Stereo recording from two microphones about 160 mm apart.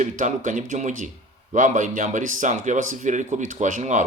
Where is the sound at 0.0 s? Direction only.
50° right (ahead or behind).